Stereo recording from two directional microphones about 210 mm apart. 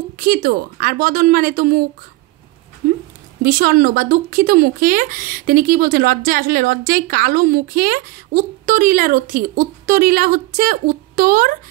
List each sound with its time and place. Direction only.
0.2 s speech: 45° right (ahead or behind)
3.4 s speech: 45° right (ahead or behind)